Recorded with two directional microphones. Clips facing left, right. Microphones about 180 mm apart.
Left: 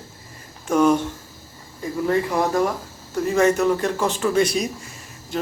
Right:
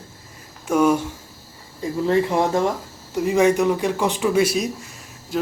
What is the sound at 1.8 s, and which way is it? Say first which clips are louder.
A man's voice: right 2 dB; 25° right (ahead or behind).